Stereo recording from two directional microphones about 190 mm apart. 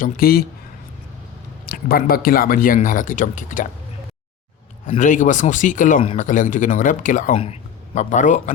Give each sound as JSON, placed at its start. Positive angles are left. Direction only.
{"t": 0.0, "sound": "speech", "side_deg": 50}
{"t": 1.7, "sound": "speech", "side_deg": 50}
{"t": 4.9, "sound": "speech", "side_deg": 40}